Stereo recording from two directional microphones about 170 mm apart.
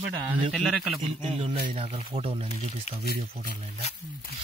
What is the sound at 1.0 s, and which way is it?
A man's voice, 35° right (ahead or behind).